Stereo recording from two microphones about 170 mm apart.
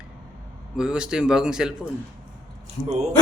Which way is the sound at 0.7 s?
5° right (ahead or behind).